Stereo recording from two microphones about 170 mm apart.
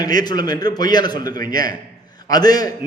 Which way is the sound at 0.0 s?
25° left (ahead or behind).